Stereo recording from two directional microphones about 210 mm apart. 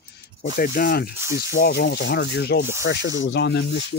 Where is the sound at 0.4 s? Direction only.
45° left (ahead or behind).